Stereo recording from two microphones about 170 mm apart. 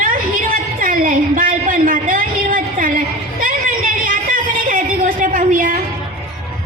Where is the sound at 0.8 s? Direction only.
55° right (ahead or behind).